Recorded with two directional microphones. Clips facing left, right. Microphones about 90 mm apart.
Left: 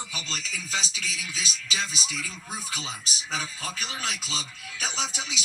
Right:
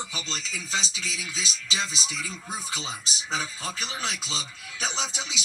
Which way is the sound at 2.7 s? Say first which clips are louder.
Right 1 dB; 30° right (ahead or behind).